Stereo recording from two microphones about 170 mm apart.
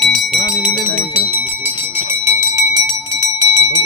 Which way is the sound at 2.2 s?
20° right (ahead or behind).